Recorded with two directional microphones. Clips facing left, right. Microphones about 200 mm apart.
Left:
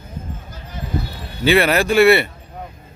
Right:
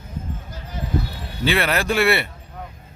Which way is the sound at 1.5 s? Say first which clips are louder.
Left 6 dB; 5° left (ahead or behind).